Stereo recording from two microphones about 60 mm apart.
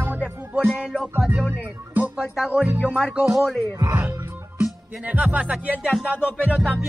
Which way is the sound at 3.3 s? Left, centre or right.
Centre.